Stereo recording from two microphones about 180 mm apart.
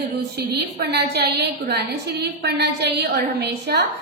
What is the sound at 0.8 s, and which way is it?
A woman's voice, 65° right (ahead or behind).